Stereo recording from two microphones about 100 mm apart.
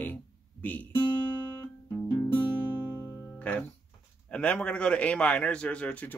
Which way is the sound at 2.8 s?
20° right (ahead or behind).